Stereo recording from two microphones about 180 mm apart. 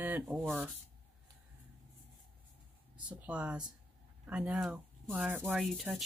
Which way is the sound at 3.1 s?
5° right (ahead or behind).